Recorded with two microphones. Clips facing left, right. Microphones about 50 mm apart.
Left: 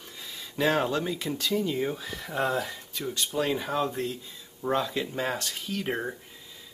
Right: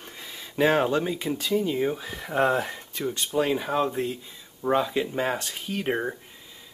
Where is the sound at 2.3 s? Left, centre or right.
Right.